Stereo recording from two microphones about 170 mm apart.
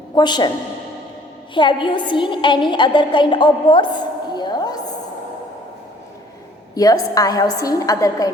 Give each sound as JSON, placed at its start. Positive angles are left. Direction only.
{"t": 0.2, "sound": "a woman's voice", "side_deg": 25}
{"t": 1.5, "sound": "a woman's voice", "side_deg": 30}
{"t": 4.4, "sound": "a sound", "side_deg": 25}
{"t": 6.7, "sound": "a woman's voice", "side_deg": 20}